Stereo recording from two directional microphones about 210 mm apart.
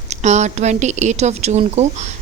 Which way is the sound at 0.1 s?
35° right (ahead or behind).